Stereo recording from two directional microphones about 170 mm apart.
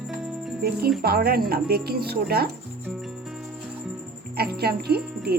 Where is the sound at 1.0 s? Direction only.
65° right (ahead or behind).